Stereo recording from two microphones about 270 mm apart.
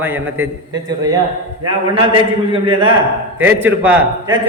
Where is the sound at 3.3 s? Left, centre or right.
Centre.